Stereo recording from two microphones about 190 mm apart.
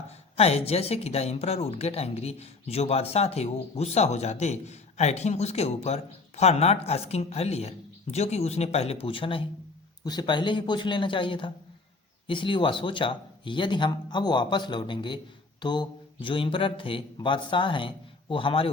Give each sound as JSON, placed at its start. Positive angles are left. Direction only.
{"t": 0.3, "sound": "a woman's voice", "side_deg": 30}